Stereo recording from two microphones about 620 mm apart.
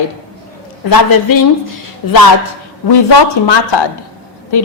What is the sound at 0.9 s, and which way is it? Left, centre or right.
A woman's voice, left.